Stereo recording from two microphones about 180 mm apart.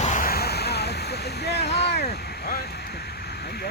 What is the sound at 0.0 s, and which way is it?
Vehicle, 45° left (ahead or behind).